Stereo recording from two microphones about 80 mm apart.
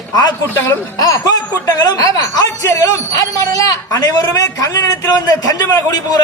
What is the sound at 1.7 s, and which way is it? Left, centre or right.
Speech, left.